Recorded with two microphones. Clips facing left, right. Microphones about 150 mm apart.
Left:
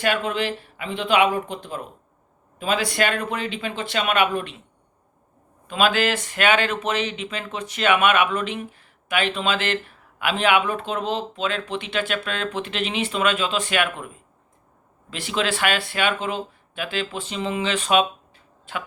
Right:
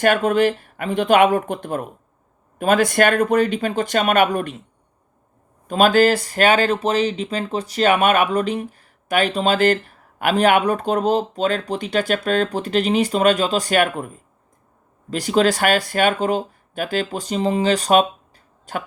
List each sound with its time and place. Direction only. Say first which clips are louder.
0.0 s speech: right 7 dB; 45° right (ahead or behind)
5.6 s speech: right 6 dB; 40° right (ahead or behind)
15.1 s speech: right 8 dB; 40° right (ahead or behind)